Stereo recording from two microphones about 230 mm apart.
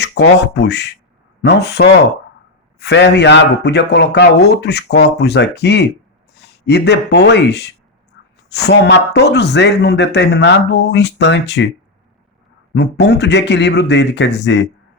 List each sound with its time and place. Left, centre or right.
0.0 s speech: left
12.7 s speech: left